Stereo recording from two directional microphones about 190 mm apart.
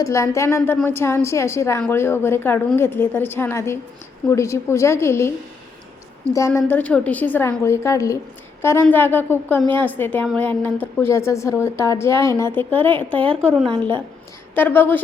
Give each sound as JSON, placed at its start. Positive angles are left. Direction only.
{"t": 0.0, "sound": "speech", "side_deg": 15}
{"t": 6.3, "sound": "speech", "side_deg": 15}
{"t": 13.1, "sound": "speech", "side_deg": -30}
{"t": 14.5, "sound": "speech", "side_deg": 10}